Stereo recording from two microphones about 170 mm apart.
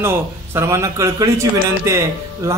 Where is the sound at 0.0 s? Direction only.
15° right (ahead or behind).